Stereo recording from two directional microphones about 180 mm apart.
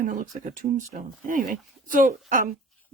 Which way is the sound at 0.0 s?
45° right (ahead or behind).